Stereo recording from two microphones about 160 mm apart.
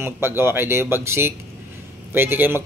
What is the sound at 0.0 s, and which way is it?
Speech, 15° right (ahead or behind).